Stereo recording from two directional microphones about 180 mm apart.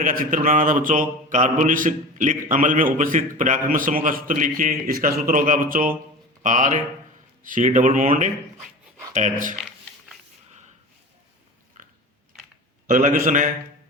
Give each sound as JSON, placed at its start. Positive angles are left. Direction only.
{"t": 0.0, "sound": "mantra", "side_deg": -50}
{"t": 6.4, "sound": "speech", "side_deg": -45}
{"t": 7.4, "sound": "mantra", "side_deg": -45}
{"t": 11.8, "sound": "a sound", "side_deg": -45}
{"t": 12.9, "sound": "mantra", "side_deg": -45}